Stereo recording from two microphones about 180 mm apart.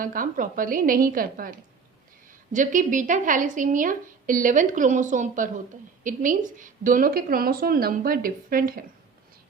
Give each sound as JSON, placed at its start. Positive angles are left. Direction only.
{"t": 0.0, "sound": "a woman's voice", "side_deg": -50}